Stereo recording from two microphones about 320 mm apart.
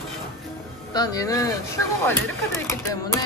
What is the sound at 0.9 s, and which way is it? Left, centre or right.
Speech, centre.